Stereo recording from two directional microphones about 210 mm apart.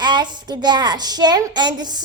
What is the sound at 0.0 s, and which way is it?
A woman's voice, 20° right (ahead or behind).